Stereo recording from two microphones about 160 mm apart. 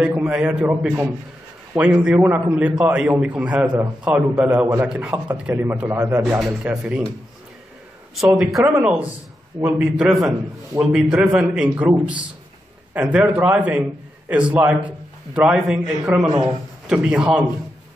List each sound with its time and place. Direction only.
0.0 s a sound: 5° right (ahead or behind)
0.6 s a man's voice: 5° right (ahead or behind)
6.3 s a man's voice: 5° right (ahead or behind)
8.2 s a man's voice: centre (ahead or behind)
16.3 s speech: 30° right (ahead or behind)
16.8 s a man's voice: 5° right (ahead or behind)